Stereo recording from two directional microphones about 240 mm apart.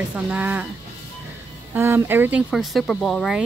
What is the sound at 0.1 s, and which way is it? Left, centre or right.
Speech, centre.